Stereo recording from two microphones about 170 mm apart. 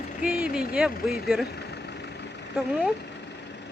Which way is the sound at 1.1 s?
65° left (ahead or behind).